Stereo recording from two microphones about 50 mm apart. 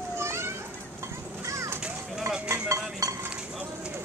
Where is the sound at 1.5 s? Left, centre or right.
Right.